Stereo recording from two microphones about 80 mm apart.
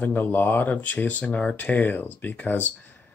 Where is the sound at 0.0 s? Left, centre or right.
Left.